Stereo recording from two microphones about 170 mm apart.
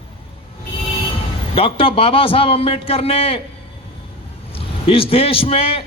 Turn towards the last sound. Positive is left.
turn(degrees=35)  # may be behind; listen again after turning